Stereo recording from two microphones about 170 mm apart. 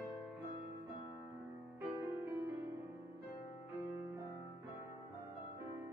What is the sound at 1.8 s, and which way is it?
Music, 15° right (ahead or behind).